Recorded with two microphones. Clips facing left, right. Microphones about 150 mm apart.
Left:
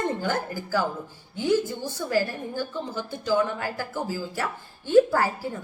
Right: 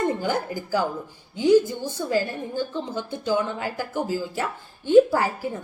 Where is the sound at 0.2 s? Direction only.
15° right (ahead or behind).